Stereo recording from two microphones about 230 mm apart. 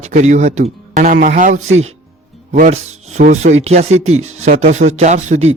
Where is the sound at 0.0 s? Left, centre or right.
Right.